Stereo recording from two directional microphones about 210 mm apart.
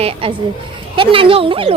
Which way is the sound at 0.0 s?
25° right (ahead or behind).